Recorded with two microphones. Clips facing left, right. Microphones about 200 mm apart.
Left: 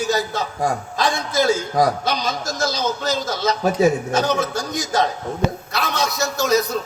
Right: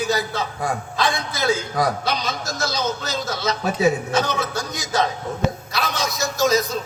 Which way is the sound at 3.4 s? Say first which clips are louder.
Left 3 dB; 45° left (ahead or behind).